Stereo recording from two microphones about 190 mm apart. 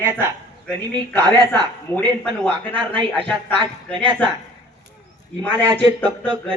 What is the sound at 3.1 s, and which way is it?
A man's voice, 10° left (ahead or behind).